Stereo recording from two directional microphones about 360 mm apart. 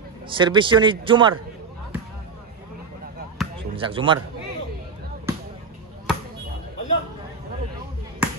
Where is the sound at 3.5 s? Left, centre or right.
Centre.